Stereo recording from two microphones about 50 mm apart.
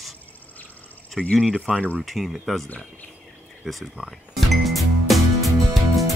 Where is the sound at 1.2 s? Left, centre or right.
Centre.